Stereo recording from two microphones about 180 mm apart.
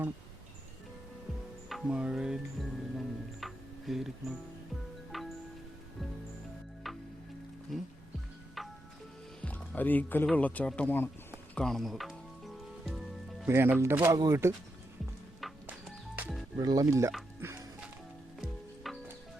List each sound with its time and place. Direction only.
1.7 s speech: 5° right (ahead or behind)
3.4 s music: centre (ahead or behind)
6.8 s music: centre (ahead or behind)
7.7 s speech: centre (ahead or behind)
8.6 s music: centre (ahead or behind)
9.4 s speech: 10° left (ahead or behind)
11.5 s music: 5° left (ahead or behind)
13.5 s speech: 10° right (ahead or behind)
15.4 s music: centre (ahead or behind)
16.6 s speech: 20° right (ahead or behind)
17.4 s music: 15° right (ahead or behind)
18.3 s music: centre (ahead or behind)